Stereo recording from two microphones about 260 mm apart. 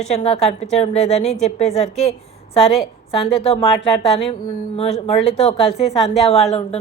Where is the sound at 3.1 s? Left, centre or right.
Left.